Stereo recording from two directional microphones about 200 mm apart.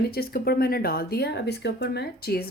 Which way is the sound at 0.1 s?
50° left (ahead or behind).